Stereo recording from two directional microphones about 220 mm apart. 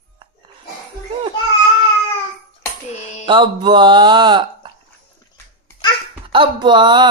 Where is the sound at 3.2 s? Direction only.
20° right (ahead or behind).